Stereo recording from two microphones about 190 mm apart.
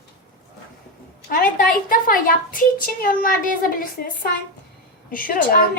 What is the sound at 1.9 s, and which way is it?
Speech, 45° left (ahead or behind).